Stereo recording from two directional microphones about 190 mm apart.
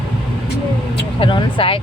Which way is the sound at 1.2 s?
25° left (ahead or behind).